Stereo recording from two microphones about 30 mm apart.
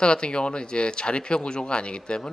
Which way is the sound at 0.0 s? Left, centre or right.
Left.